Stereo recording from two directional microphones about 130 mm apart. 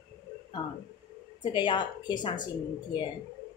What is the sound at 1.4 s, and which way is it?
A woman's voice, 35° left (ahead or behind).